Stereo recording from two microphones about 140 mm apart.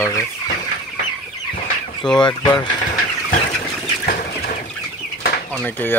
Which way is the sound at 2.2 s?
35° left (ahead or behind).